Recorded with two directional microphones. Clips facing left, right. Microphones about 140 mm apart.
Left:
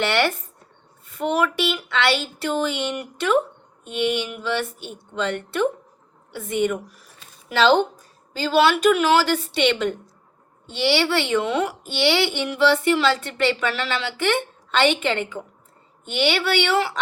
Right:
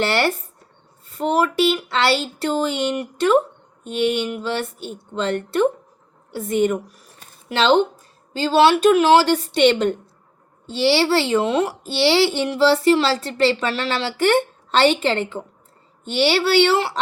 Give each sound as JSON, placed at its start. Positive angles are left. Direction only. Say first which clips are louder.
{"t": 0.0, "sound": "a child's voice", "louder": "right 1 dB", "side_deg": -35}
{"t": 8.4, "sound": "a child's voice", "louder": "right 3 dB", "side_deg": -35}